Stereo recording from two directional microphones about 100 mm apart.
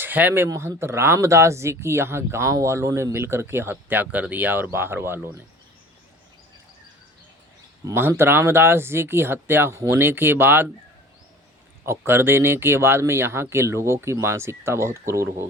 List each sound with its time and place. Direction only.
0.0 s speech: 20° right (ahead or behind)
7.9 s speech: 25° right (ahead or behind)
11.9 s speech: 25° right (ahead or behind)